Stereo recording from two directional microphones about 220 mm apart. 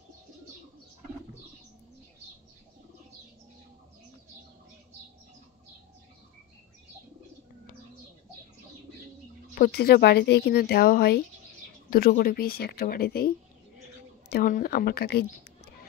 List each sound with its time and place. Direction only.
9.6 s speech: 45° left (ahead or behind)
14.3 s speech: 40° left (ahead or behind)